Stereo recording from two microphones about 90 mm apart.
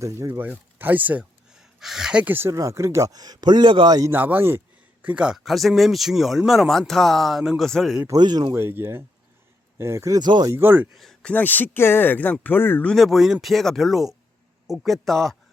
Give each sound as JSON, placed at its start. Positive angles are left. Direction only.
{"t": 0.3, "sound": "speech", "side_deg": -20}
{"t": 1.5, "sound": "a sound", "side_deg": -5}
{"t": 2.2, "sound": "speech", "side_deg": -25}
{"t": 4.1, "sound": "speech", "side_deg": -20}
{"t": 5.0, "sound": "speech", "side_deg": -10}
{"t": 5.4, "sound": "speech", "side_deg": 0}
{"t": 8.1, "sound": "speech", "side_deg": -50}
{"t": 8.5, "sound": "speech", "side_deg": -25}
{"t": 10.2, "sound": "speech", "side_deg": -50}
{"t": 10.5, "sound": "speech", "side_deg": -25}
{"t": 10.9, "sound": "speech", "side_deg": 5}
{"t": 12.8, "sound": "speech", "side_deg": 5}